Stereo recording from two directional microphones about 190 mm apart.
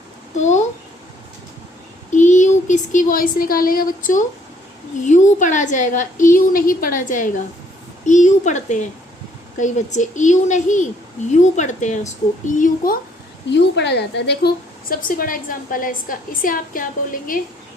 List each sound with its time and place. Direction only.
0.3 s a sound: 40° left (ahead or behind)
2.1 s a woman's voice: 40° left (ahead or behind)
13.5 s a woman's voice: 65° left (ahead or behind); by 17.4 s 45° left (ahead or behind)